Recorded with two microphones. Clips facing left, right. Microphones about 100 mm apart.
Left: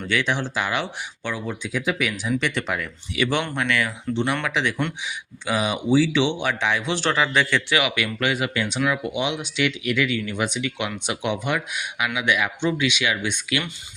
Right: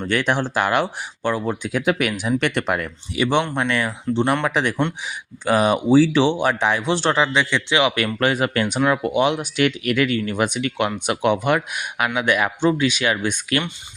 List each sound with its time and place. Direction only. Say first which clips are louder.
0.0 s speech: right 3 dB; 45° right (ahead or behind)
3.2 s a man's voice: right 4 dB; 30° right (ahead or behind)
7.3 s a man's voice: right 2 dB; 20° right (ahead or behind)
7.9 s speech: right 4 dB; 40° right (ahead or behind)